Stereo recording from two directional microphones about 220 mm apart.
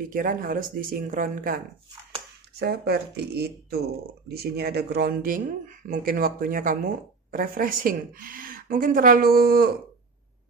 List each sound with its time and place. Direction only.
0.1 s speech: 40° right (ahead or behind)
2.6 s speech: 45° right (ahead or behind)